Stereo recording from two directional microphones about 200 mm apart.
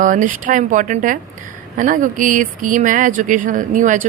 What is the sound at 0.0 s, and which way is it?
A woman's voice, 40° right (ahead or behind).